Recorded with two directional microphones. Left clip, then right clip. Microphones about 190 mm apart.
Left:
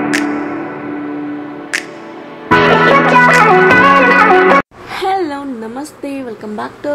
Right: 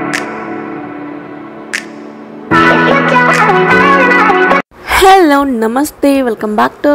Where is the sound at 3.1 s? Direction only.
Centre (ahead or behind).